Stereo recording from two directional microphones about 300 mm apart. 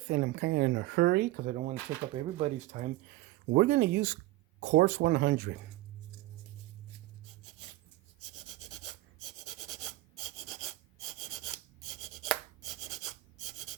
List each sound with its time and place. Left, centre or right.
0.1 s speech: right
3.5 s speech: right
8.4 s a sound: centre
9.2 s rub: centre